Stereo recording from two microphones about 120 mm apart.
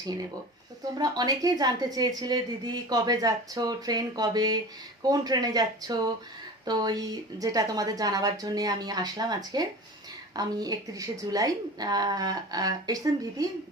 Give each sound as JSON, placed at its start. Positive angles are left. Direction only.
{"t": 0.0, "sound": "a woman's voice", "side_deg": -35}